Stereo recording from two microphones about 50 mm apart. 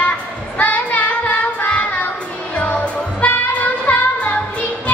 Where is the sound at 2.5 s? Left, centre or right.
Left.